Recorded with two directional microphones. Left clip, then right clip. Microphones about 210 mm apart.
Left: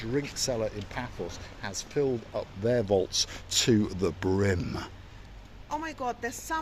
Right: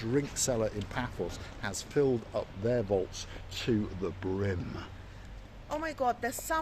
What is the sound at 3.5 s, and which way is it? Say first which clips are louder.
Speech: left 7 dB; 60° left (ahead or behind).